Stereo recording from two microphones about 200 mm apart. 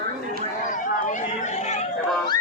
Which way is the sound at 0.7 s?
40° left (ahead or behind).